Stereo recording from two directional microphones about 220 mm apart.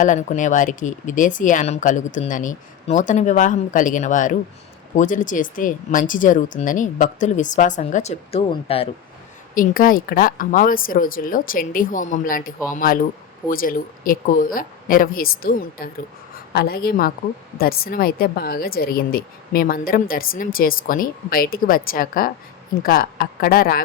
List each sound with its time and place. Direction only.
0.0 s a woman's voice: 35° left (ahead or behind)
9.6 s a woman's voice: 40° left (ahead or behind)